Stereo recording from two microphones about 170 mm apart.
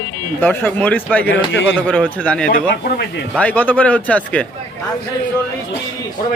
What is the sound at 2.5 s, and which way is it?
Speech, 65° left (ahead or behind).